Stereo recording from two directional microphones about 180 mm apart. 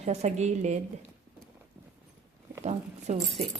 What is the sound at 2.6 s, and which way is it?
Keys jangling, 40° right (ahead or behind).